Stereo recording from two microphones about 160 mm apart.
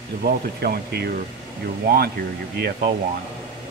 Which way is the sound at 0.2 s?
75° right (ahead or behind).